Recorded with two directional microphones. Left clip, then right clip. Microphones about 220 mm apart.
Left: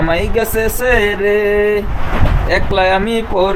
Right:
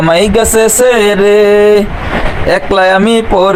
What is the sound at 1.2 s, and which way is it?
Speech, 25° right (ahead or behind).